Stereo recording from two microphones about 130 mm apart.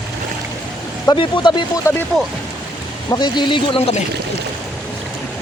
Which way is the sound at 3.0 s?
35° left (ahead or behind).